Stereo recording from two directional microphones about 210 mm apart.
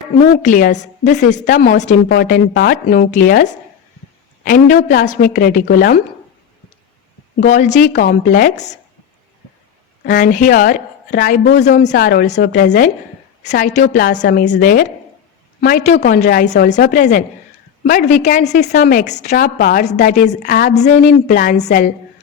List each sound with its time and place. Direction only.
0.2 s a woman's voice: 40° left (ahead or behind)
7.4 s a woman's voice: 35° left (ahead or behind)
10.0 s a woman's voice: 40° left (ahead or behind)
20.4 s a woman's voice: 50° left (ahead or behind)
20.7 s a woman's voice: 35° left (ahead or behind)